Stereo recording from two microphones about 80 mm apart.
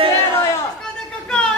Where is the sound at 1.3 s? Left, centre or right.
Centre.